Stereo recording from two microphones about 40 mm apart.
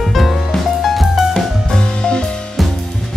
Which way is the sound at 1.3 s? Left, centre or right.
Centre.